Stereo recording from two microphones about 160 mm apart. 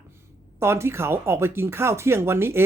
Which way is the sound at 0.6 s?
15° right (ahead or behind).